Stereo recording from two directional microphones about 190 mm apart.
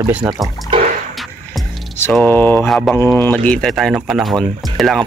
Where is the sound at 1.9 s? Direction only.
10° left (ahead or behind).